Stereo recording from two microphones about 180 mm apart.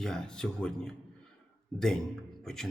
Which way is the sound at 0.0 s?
5° left (ahead or behind).